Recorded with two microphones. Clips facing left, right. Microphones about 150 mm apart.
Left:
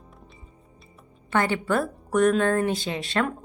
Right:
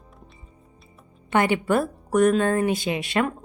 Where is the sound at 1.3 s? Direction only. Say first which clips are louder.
Right 3 dB; 15° right (ahead or behind).